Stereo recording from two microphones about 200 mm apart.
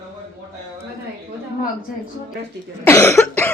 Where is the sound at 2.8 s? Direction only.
10° left (ahead or behind).